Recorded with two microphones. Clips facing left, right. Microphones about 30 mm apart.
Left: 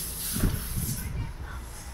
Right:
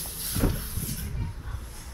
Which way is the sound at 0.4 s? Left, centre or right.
Centre.